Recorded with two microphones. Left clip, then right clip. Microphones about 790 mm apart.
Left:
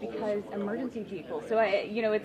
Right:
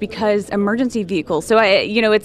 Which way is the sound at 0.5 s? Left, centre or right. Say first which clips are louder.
Right 15 dB; right.